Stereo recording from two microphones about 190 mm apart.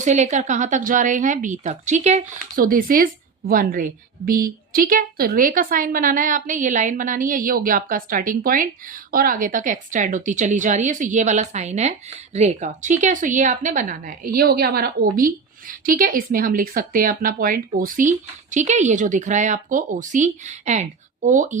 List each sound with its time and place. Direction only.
0.0 s a woman's voice: 40° right (ahead or behind)
14.3 s a woman's voice: 55° right (ahead or behind)